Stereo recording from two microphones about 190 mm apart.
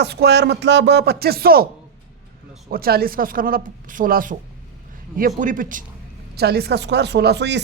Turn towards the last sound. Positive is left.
turn(degrees=-65)  # may be behind; listen again after turning